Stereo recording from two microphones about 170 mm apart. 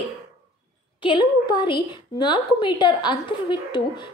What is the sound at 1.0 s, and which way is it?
A woman's voice, 25° left (ahead or behind).